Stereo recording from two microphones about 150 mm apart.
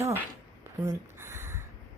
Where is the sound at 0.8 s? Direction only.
15° right (ahead or behind).